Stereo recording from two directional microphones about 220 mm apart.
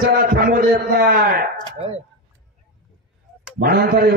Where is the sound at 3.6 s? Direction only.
45° right (ahead or behind).